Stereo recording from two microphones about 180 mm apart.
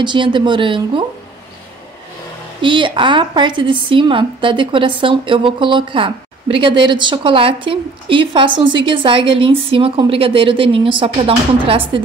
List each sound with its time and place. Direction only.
0.0 s a woman's voice: 25° right (ahead or behind)
2.6 s a woman's voice: 25° right (ahead or behind)